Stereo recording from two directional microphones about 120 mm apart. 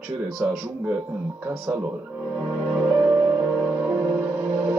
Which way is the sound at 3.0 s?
25° right (ahead or behind).